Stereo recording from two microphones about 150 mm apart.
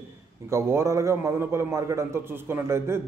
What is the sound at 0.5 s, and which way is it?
A man's voice, 20° right (ahead or behind).